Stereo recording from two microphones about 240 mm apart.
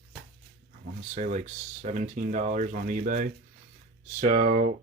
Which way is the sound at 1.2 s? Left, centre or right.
Right.